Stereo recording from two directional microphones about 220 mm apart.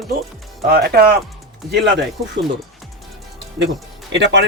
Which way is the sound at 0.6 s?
45° right (ahead or behind).